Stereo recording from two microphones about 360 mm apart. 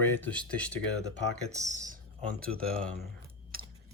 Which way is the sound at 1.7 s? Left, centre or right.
Right.